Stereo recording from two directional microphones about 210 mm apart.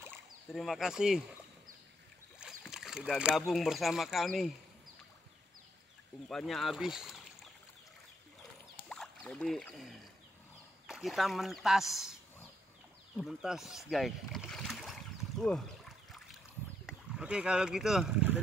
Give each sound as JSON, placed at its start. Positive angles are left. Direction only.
{"t": 0.5, "sound": "speech", "side_deg": 0}
{"t": 2.7, "sound": "speech", "side_deg": 0}
{"t": 6.2, "sound": "speech", "side_deg": 0}
{"t": 8.8, "sound": "a sound", "side_deg": 5}
{"t": 10.9, "sound": "speech", "side_deg": 0}
{"t": 13.2, "sound": "rowboat", "side_deg": 0}
{"t": 16.8, "sound": "speech", "side_deg": -5}